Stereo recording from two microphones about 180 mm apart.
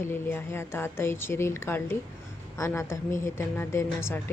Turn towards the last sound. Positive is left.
turn(degrees=15)  # may be behind; listen again after turning